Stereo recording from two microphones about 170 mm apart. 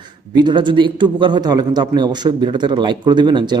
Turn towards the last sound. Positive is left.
turn(degrees=-25)  # may be behind; listen again after turning